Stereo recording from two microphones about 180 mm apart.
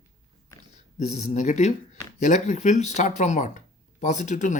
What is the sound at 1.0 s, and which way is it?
Speech, 40° left (ahead or behind).